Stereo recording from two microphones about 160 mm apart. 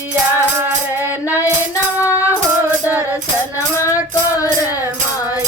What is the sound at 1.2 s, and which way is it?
Female singing, 20° left (ahead or behind).